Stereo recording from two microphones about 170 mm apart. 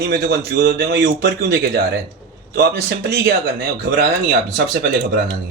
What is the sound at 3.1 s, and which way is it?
Speech, 70° right (ahead or behind).